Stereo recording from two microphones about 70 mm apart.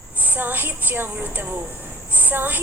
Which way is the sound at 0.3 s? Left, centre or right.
Right.